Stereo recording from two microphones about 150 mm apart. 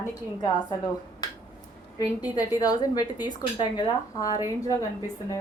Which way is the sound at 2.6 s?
25° left (ahead or behind).